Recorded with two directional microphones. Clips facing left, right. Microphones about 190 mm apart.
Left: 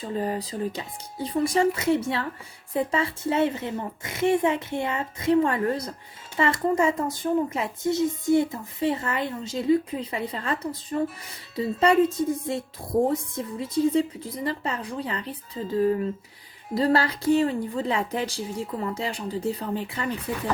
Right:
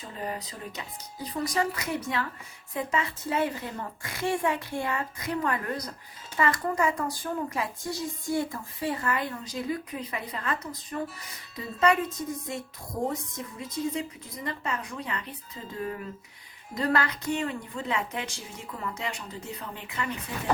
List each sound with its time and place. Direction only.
0.0 s speech: 30° left (ahead or behind)